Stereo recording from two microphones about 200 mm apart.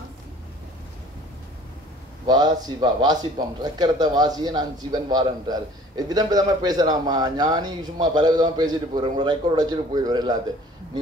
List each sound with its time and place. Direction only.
2.2 s a man's voice: 20° right (ahead or behind)